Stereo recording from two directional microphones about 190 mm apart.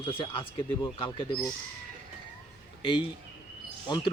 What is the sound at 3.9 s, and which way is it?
Speech, 25° left (ahead or behind).